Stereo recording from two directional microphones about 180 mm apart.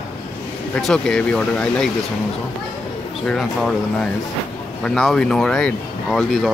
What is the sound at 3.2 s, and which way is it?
Speech, 5° left (ahead or behind).